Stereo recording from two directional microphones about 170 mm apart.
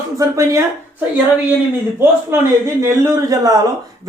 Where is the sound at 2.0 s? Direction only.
15° right (ahead or behind).